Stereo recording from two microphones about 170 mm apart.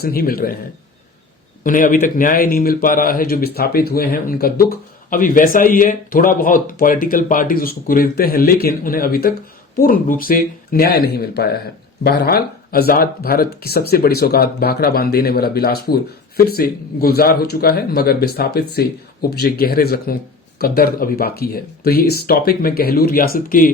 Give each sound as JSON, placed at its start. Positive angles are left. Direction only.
{"t": 0.0, "sound": "speech", "side_deg": 60}
{"t": 1.6, "sound": "speech", "side_deg": 50}